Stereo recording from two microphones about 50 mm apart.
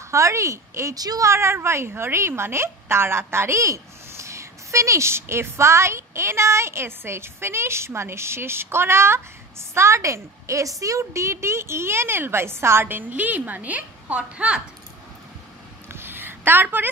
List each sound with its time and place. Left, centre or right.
0.1 s a woman's voice: right
9.8 s a woman's voice: right
13.1 s a woman's voice: right
15.9 s a sound: right